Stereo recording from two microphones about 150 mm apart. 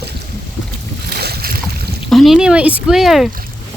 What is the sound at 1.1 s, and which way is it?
Boat, 90° right.